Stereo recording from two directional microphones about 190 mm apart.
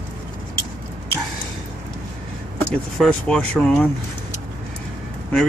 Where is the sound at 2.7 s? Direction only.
5° left (ahead or behind).